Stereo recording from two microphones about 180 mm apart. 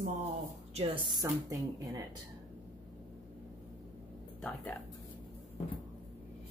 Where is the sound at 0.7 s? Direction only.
30° right (ahead or behind).